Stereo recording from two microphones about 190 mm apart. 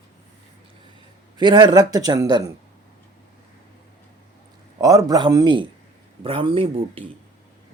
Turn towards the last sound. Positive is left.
turn(degrees=-30)  # may be behind; listen again after turning